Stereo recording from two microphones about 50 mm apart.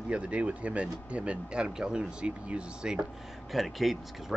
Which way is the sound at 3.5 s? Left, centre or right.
Centre.